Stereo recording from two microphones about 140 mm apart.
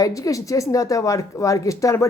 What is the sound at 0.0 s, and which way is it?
Speech, 25° left (ahead or behind).